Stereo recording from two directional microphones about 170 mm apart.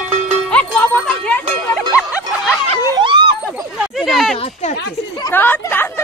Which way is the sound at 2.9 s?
30° right (ahead or behind).